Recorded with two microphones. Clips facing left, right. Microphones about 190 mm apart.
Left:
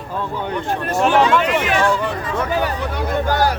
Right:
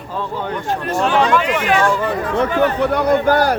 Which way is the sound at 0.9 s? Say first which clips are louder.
Left 1 dB; 5° left (ahead or behind).